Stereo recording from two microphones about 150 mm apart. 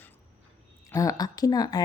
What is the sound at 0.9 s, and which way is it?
Speech, 20° left (ahead or behind).